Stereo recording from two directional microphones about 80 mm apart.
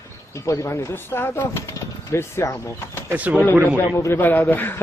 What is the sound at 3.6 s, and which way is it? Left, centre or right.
Speech, left.